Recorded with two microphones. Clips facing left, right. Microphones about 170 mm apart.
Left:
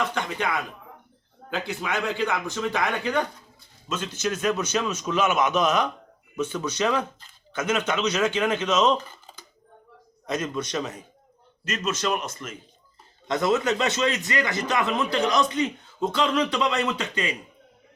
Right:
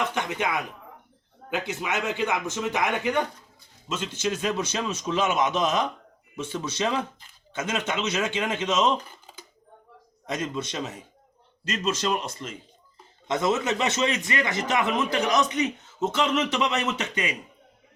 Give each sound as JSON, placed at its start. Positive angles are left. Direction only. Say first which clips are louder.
{"t": 0.1, "sound": "a man's voice", "louder": "even", "side_deg": -20}
{"t": 10.3, "sound": "a man's voice", "louder": "left 2 dB", "side_deg": -25}